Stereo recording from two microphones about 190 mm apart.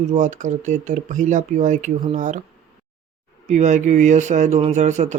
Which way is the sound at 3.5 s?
40° right (ahead or behind).